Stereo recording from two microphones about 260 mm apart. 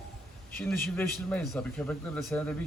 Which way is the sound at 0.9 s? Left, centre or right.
Centre.